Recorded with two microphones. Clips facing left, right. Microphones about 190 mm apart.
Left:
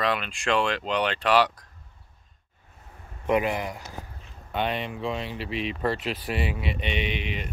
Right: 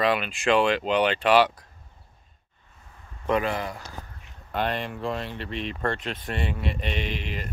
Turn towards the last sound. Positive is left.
turn(degrees=0)  # may be behind; listen again after turning